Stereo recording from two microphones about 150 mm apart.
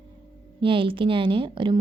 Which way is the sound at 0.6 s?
35° right (ahead or behind).